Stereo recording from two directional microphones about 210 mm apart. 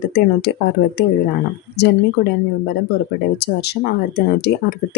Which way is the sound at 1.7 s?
55° left (ahead or behind).